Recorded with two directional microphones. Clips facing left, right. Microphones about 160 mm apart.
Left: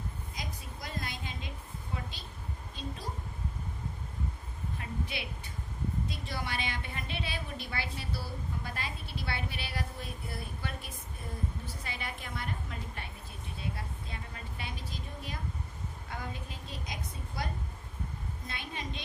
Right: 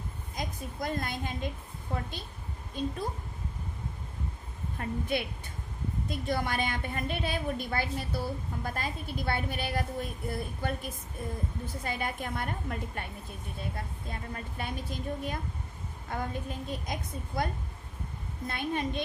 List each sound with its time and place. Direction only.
0.3 s a woman's voice: 50° right (ahead or behind)
4.8 s a woman's voice: 50° right (ahead or behind)